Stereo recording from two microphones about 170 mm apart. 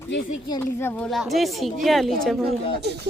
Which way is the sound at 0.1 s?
90° left.